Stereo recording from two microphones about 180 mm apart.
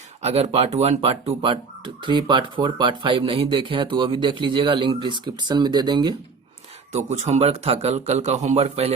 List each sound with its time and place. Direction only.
0.2 s speech: 35° right (ahead or behind)
6.9 s a man's voice: 40° right (ahead or behind)